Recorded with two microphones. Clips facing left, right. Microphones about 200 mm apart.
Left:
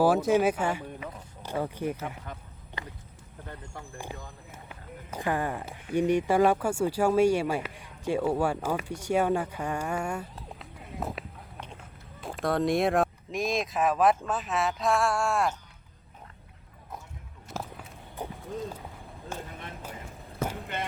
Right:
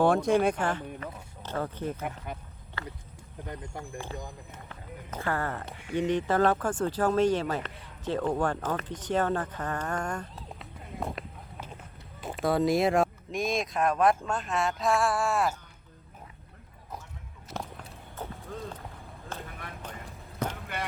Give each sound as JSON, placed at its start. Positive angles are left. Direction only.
{"t": 0.0, "sound": "speech", "side_deg": 5}
{"t": 2.3, "sound": "speech", "side_deg": -10}
{"t": 2.8, "sound": "a sound", "side_deg": 15}
{"t": 3.4, "sound": "speech", "side_deg": -15}
{"t": 3.9, "sound": "speech", "side_deg": 10}
{"t": 17.5, "sound": "a sound", "side_deg": 5}
{"t": 18.2, "sound": "run", "side_deg": 15}
{"t": 19.3, "sound": "vehicle", "side_deg": 20}